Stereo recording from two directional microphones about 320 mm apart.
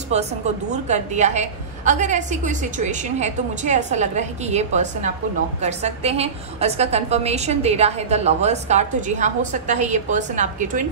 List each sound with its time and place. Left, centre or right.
0.1 s a woman's voice: centre